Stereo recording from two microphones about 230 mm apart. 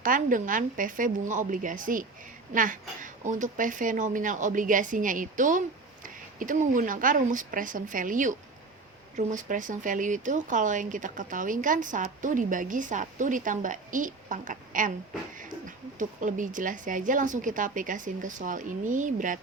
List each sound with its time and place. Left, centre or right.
0.0 s speech: right